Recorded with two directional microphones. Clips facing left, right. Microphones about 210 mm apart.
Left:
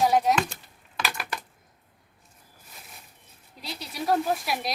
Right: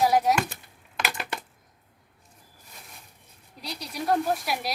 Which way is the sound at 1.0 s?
20° right (ahead or behind).